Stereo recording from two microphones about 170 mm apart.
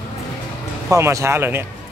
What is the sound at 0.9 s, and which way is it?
Speech, 15° right (ahead or behind).